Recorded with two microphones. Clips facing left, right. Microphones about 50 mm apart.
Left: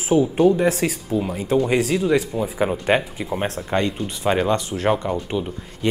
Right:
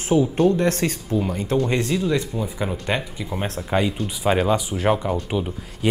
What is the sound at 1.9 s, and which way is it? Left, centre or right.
Speech, centre.